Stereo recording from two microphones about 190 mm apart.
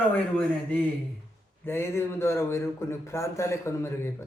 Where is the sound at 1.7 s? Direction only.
15° left (ahead or behind).